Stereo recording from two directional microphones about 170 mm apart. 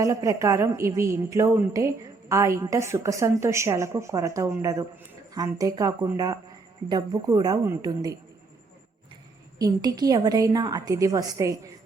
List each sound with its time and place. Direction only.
0.0 s a woman's voice: 20° right (ahead or behind)
9.6 s a woman's voice: 20° right (ahead or behind)